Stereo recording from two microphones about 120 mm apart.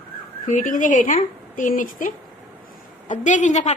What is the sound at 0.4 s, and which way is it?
A woman's voice, 90° left.